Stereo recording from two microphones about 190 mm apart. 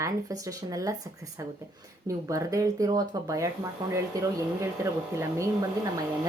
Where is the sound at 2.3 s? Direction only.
15° right (ahead or behind).